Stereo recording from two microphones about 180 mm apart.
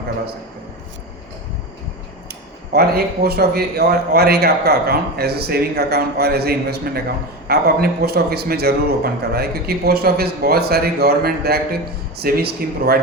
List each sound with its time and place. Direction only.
2.7 s a man's voice: 60° right (ahead or behind)